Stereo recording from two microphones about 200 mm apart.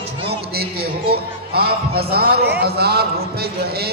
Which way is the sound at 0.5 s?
50° right (ahead or behind).